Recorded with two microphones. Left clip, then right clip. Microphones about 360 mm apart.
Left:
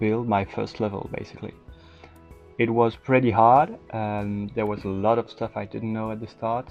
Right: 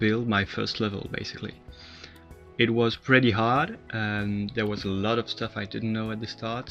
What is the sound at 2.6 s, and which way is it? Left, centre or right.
Speech, centre.